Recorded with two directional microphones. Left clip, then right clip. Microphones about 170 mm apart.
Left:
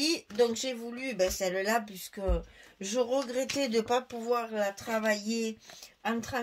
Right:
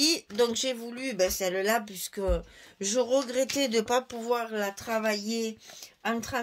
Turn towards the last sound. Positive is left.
turn(degrees=-50)  # may be behind; listen again after turning